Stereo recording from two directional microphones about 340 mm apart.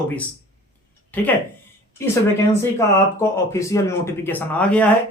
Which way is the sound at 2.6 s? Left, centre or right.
Centre.